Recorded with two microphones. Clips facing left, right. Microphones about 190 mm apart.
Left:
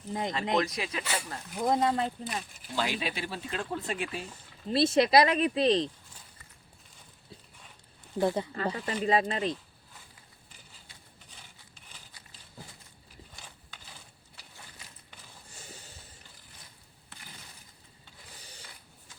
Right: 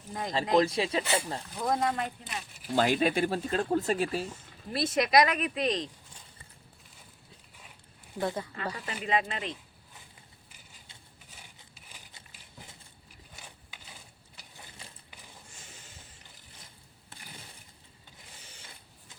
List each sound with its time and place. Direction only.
0.1 s speech: 20° left (ahead or behind)
0.5 s speech: 30° right (ahead or behind)
1.5 s speech: 25° left (ahead or behind)
2.7 s speech: 50° right (ahead or behind)
4.7 s speech: 30° left (ahead or behind)
8.2 s speech: 25° left (ahead or behind)
11.7 s a sound: 10° right (ahead or behind)
14.8 s a sound: 30° right (ahead or behind)
15.5 s a sound: 35° left (ahead or behind)